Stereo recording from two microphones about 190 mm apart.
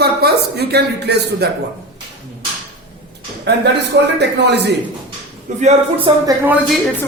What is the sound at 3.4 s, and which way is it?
A man's voice, 65° right (ahead or behind).